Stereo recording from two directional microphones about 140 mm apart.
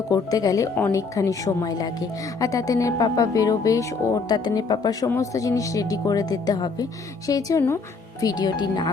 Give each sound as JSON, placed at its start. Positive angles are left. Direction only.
{"t": 0.1, "sound": "speech", "side_deg": 25}